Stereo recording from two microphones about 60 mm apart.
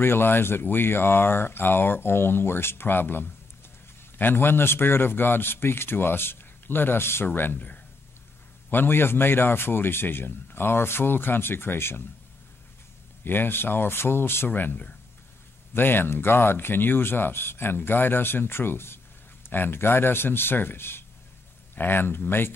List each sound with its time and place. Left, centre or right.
0.0 s a man's voice: left
8.6 s a man's voice: left
13.2 s a man's voice: left